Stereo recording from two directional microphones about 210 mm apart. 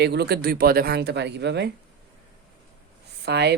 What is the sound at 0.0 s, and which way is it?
A woman's voice, 55° right (ahead or behind).